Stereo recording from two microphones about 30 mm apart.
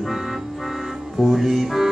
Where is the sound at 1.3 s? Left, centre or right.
Centre.